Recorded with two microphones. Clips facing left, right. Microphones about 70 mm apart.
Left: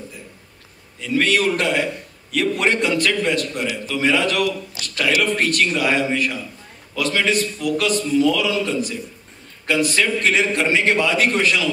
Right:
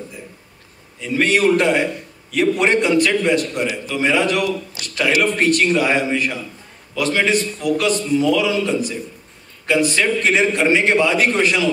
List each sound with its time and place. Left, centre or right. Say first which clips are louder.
1.0 s a man's voice: right 3 dB; right